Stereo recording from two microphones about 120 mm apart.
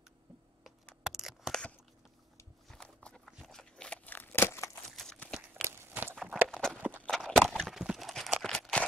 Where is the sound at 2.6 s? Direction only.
5° left (ahead or behind).